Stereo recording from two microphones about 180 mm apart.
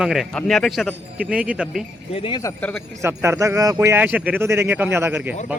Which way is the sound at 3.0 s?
15° right (ahead or behind).